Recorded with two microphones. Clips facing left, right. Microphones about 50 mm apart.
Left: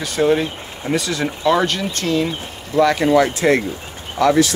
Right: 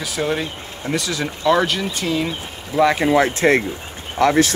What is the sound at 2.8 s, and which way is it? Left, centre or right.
Speech, right.